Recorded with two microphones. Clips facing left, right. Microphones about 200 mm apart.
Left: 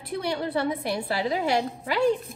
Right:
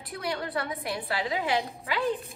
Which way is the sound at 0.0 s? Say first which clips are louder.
Left 5 dB; 30° left (ahead or behind).